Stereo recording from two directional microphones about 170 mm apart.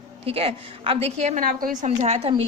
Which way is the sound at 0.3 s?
35° right (ahead or behind).